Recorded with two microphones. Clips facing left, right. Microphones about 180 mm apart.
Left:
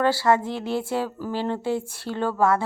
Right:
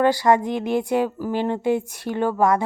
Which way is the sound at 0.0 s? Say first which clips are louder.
Right 3 dB; 15° right (ahead or behind).